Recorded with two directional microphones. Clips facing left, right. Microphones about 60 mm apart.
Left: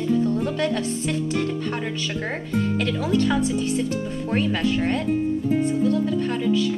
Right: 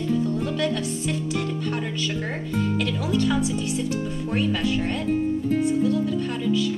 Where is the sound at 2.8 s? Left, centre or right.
Left.